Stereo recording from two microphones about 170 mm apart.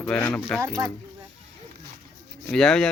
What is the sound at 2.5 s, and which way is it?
Speech, 5° left (ahead or behind).